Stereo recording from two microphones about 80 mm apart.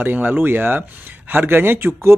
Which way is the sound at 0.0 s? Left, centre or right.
Right.